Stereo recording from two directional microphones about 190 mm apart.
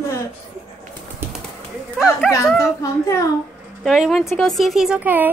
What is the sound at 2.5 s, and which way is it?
Speech, 15° left (ahead or behind).